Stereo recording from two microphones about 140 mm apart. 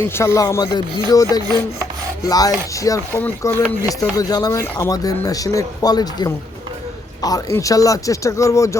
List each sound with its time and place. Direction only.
0.0 s speech: 20° left (ahead or behind)